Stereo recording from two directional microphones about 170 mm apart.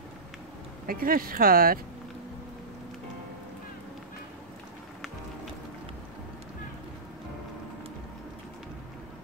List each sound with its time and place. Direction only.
0.8 s speech: 60° right (ahead or behind)